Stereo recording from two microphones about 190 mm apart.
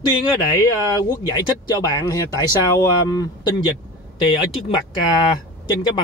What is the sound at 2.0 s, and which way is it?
Speech, 15° left (ahead or behind).